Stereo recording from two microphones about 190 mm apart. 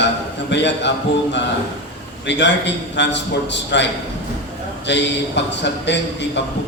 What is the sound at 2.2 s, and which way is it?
Speech, 65° left (ahead or behind).